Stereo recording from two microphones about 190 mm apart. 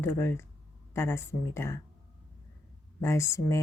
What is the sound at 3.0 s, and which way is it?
Speech, 15° left (ahead or behind).